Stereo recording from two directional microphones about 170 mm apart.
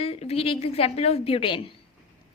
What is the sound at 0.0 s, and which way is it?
A woman's voice, 35° left (ahead or behind).